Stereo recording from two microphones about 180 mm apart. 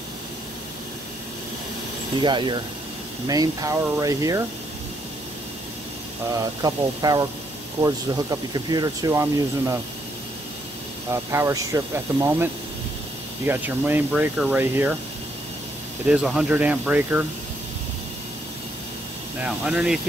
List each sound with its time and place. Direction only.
2.1 s speech: 25° right (ahead or behind)
6.3 s speech: 20° right (ahead or behind)
11.1 s speech: 15° right (ahead or behind)
13.5 s speech: 10° right (ahead or behind)
16.1 s speech: 5° right (ahead or behind)
19.4 s speech: 5° right (ahead or behind)